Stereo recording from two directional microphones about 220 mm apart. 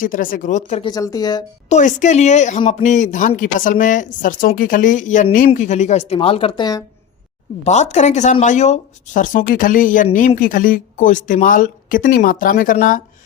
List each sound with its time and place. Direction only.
0.0 s speech: 40° left (ahead or behind)
0.9 s speech: 15° left (ahead or behind)
1.7 s speech: 35° left (ahead or behind)
7.6 s speech: 30° left (ahead or behind)